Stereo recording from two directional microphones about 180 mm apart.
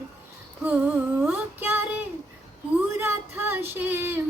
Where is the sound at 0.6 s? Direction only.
10° right (ahead or behind).